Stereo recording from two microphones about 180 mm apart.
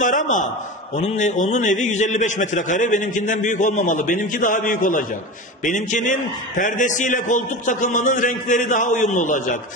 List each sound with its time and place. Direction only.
0.0 s a man's voice: 45° left (ahead or behind)